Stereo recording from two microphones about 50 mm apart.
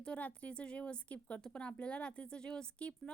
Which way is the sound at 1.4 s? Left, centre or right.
Centre.